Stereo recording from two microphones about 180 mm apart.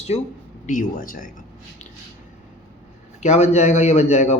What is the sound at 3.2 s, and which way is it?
Speech, 40° left (ahead or behind).